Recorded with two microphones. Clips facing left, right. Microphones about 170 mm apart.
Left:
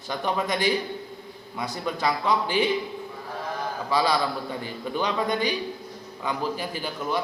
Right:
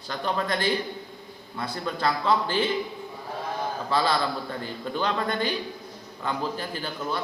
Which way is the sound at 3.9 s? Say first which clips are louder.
Left 2 dB; 15° left (ahead or behind).